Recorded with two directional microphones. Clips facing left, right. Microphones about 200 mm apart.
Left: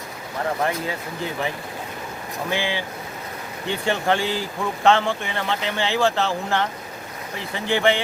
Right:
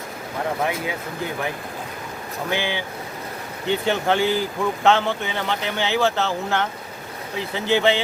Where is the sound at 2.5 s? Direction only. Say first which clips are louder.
Even; 65° right (ahead or behind).